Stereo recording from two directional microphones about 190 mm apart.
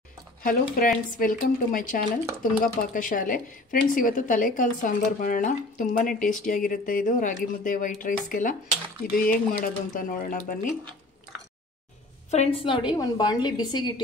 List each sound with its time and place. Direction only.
0.4 s speech: 50° left (ahead or behind)
12.3 s a woman's voice: 30° left (ahead or behind)